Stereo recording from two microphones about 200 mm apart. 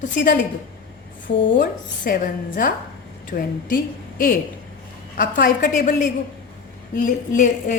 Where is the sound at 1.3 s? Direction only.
65° left (ahead or behind).